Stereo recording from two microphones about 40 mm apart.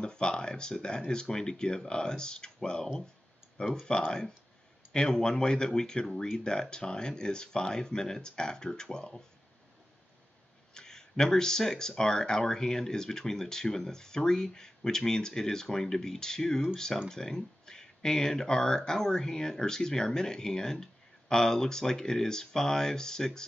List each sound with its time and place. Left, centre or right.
0.0 s speech: left
4.9 s speech: centre
10.7 s speech: centre